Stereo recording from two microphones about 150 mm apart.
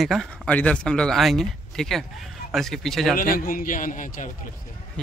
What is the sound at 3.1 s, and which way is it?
A man's voice, 70° left (ahead or behind).